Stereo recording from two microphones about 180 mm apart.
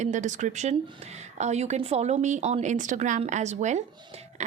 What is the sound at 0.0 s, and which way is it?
A woman's voice, 45° right (ahead or behind).